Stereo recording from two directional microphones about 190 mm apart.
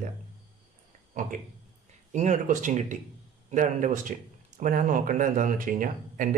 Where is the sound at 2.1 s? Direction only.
40° right (ahead or behind).